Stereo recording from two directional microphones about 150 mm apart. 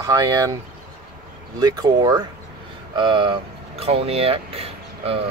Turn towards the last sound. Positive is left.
turn(degrees=-40)  # may be behind; listen again after turning